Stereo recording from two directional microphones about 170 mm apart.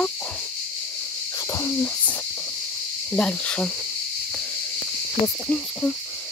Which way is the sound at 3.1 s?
5° left (ahead or behind).